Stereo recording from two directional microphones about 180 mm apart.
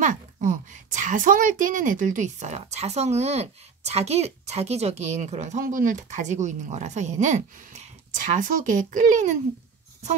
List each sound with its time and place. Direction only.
0.0 s a woman's voice: 45° right (ahead or behind)